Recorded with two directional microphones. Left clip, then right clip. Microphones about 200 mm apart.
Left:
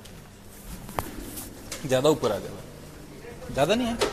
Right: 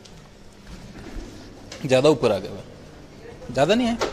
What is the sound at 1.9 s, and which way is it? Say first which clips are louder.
Speech: right 5 dB; 35° right (ahead or behind).